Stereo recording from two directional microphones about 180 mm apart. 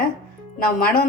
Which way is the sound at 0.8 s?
55° left (ahead or behind).